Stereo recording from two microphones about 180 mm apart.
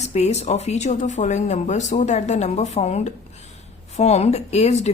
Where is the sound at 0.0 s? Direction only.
40° left (ahead or behind).